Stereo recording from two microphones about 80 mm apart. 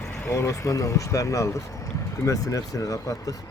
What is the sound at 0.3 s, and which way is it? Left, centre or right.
Speech, left.